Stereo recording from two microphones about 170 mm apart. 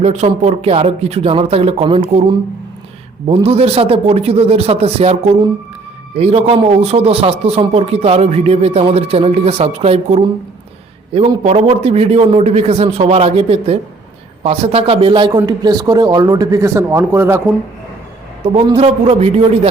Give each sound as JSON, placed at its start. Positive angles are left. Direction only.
{"t": 0.0, "sound": "a man's voice", "side_deg": -40}
{"t": 3.4, "sound": "a man's voice", "side_deg": -35}
{"t": 11.4, "sound": "a man's voice", "side_deg": -35}
{"t": 18.8, "sound": "a man's voice", "side_deg": -35}